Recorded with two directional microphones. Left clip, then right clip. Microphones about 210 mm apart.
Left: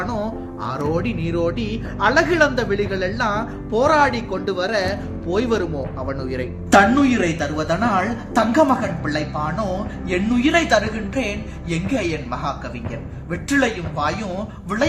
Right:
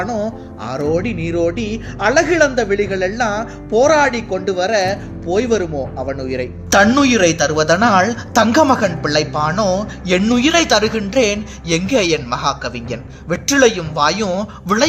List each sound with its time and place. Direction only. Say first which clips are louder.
0.6 s a man's voice: right 5 dB; 10° right (ahead or behind)
6.7 s a woman's voice: right 2 dB; 50° right (ahead or behind)